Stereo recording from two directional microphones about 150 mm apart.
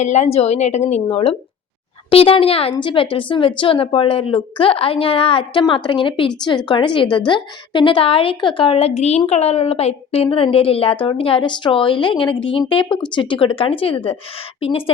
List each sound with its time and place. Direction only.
0.0 s a woman's voice: 50° left (ahead or behind)